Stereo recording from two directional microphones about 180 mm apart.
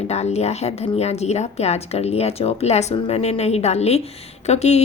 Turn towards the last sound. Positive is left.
turn(degrees=35)  # may be behind; listen again after turning